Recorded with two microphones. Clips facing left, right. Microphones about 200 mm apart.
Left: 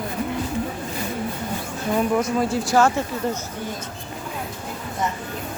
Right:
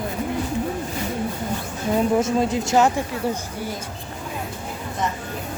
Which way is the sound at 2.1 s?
25° right (ahead or behind).